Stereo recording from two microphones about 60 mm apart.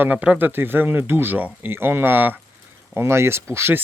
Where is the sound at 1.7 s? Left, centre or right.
Right.